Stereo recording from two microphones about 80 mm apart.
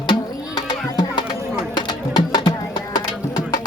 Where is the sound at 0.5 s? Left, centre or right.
Left.